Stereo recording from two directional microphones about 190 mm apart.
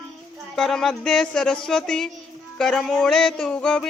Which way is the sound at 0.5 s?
Centre (ahead or behind).